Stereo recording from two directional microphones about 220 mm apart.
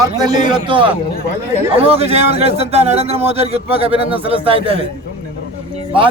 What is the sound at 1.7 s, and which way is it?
A man's voice, 25° right (ahead or behind).